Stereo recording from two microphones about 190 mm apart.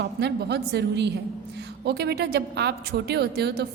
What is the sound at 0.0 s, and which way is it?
A woman's voice, 60° right (ahead or behind).